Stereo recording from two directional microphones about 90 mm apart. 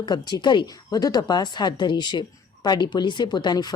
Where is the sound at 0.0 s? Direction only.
50° left (ahead or behind).